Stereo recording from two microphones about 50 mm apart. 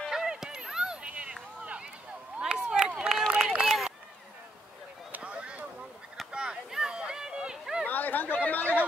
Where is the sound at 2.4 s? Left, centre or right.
Centre.